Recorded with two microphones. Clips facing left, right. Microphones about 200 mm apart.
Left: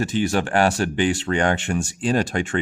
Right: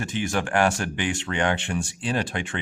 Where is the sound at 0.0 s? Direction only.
35° left (ahead or behind).